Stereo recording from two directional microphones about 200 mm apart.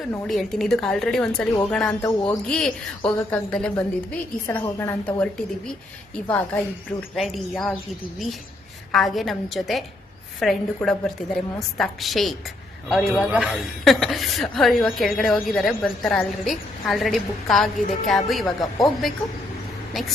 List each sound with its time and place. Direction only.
0.0 s a woman's voice: centre (ahead or behind)
2.0 s a woman's voice: 15° left (ahead or behind)
2.5 s a woman's voice: 5° left (ahead or behind)
8.9 s a woman's voice: centre (ahead or behind)